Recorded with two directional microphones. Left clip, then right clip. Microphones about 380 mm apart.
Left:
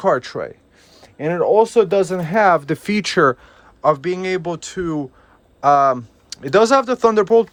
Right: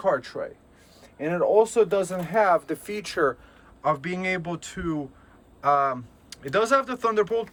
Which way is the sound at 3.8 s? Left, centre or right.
Centre.